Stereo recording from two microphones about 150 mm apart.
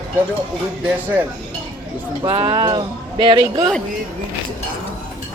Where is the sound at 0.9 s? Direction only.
10° right (ahead or behind).